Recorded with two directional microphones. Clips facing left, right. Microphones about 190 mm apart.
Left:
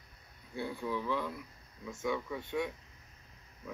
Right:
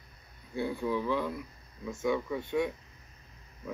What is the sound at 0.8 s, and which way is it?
Speech, 15° right (ahead or behind).